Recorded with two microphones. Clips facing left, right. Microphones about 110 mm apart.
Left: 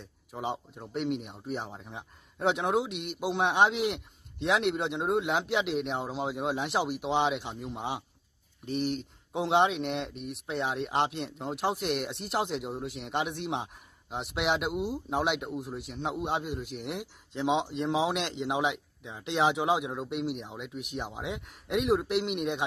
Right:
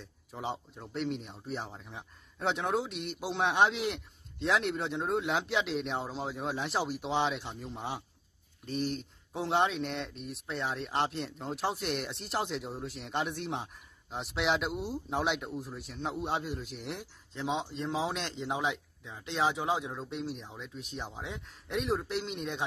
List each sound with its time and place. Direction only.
0.3 s speech: 10° left (ahead or behind)
14.1 s a man's voice: 5° left (ahead or behind)